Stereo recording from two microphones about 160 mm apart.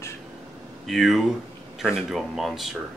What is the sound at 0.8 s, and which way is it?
Speech, centre (ahead or behind).